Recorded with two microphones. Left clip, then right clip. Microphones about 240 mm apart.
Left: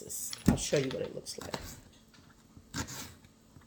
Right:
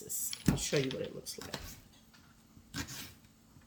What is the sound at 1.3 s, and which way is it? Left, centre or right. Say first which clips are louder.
Speech: left 3 dB; left.